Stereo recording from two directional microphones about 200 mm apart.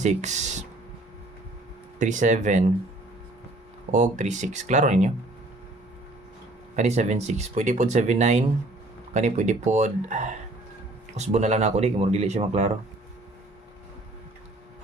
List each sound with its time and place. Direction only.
0.0 s speech: 35° right (ahead or behind)
2.0 s speech: 40° right (ahead or behind)
3.9 s speech: 35° right (ahead or behind)
6.7 s speech: 35° right (ahead or behind)